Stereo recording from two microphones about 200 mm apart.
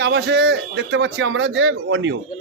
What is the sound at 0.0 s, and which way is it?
A man's voice, 60° right (ahead or behind).